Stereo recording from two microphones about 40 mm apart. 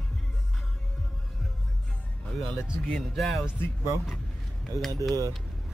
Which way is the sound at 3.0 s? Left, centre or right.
Centre.